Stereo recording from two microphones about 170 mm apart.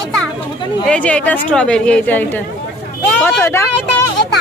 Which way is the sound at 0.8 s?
5° left (ahead or behind).